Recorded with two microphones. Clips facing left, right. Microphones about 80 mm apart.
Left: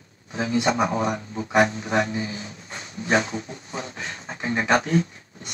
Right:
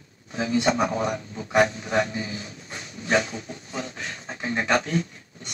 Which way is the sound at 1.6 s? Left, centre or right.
Centre.